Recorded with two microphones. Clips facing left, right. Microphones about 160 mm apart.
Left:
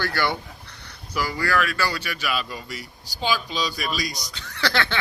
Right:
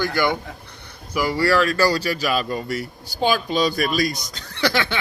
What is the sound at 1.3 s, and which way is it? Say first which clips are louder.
Speech: right 7 dB; 30° right (ahead or behind).